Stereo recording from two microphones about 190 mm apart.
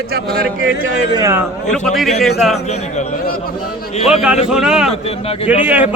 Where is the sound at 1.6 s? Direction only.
Centre (ahead or behind).